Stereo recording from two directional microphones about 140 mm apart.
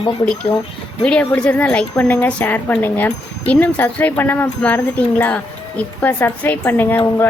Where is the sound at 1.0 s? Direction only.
10° left (ahead or behind).